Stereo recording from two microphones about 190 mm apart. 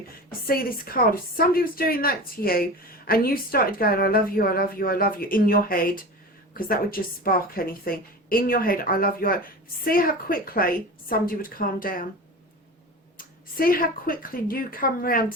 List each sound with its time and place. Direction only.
0.3 s a woman's voice: 50° left (ahead or behind)
13.1 s a woman's voice: 50° left (ahead or behind)